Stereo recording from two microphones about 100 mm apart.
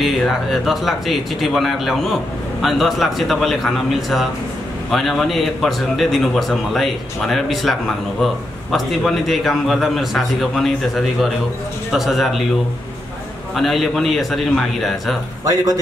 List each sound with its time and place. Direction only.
0.0 s speech: centre (ahead or behind)
8.7 s speech: centre (ahead or behind)
13.6 s speech: centre (ahead or behind)
15.4 s a man's voice: 35° right (ahead or behind)